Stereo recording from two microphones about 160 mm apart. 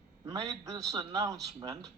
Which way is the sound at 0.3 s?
20° right (ahead or behind).